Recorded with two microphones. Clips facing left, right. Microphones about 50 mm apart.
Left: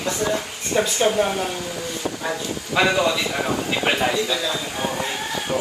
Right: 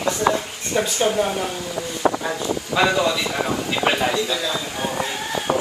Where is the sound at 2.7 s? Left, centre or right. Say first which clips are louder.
Even; right.